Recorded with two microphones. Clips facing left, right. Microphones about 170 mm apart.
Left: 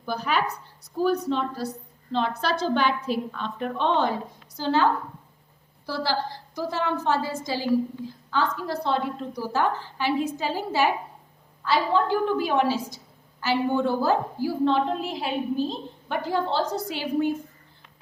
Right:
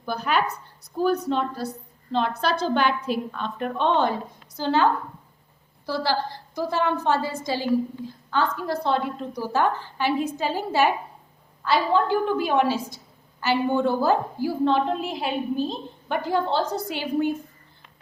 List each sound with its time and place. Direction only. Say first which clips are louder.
0.0 s a woman's voice: right 2 dB; 55° right (ahead or behind)